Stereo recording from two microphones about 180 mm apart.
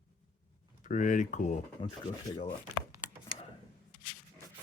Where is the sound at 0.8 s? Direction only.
45° left (ahead or behind).